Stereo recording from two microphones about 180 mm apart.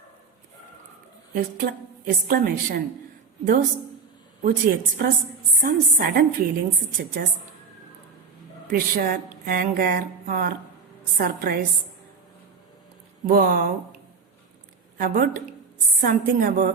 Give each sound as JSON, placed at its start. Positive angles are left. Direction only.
{"t": 1.3, "sound": "speech", "side_deg": -50}
{"t": 4.4, "sound": "a woman's voice", "side_deg": -55}
{"t": 8.7, "sound": "a woman's voice", "side_deg": -50}
{"t": 13.2, "sound": "speech", "side_deg": -50}
{"t": 14.9, "sound": "speech", "side_deg": -50}